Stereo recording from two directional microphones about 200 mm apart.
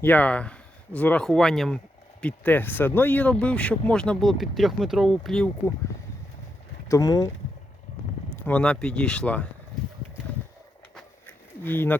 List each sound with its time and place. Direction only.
0.0 s speech: 10° left (ahead or behind)
6.8 s speech: 15° left (ahead or behind)
8.4 s speech: 5° left (ahead or behind)
10.9 s a sound: 10° left (ahead or behind)